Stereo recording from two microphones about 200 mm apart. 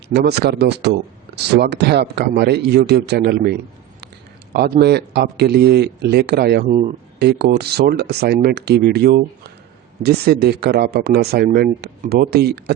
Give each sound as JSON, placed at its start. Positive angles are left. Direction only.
{"t": 0.1, "sound": "a man's voice", "side_deg": -55}
{"t": 4.8, "sound": "speech", "side_deg": -55}
{"t": 6.7, "sound": "speech", "side_deg": -35}
{"t": 7.2, "sound": "speech", "side_deg": -55}